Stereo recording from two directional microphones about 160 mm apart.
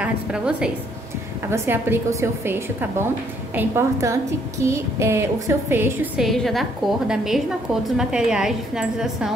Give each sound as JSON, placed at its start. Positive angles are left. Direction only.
{"t": 0.0, "sound": "a woman's voice", "side_deg": -5}
{"t": 6.1, "sound": "a woman's voice", "side_deg": 0}